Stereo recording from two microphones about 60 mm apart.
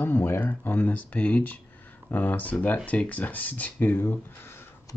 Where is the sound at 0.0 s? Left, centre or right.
Left.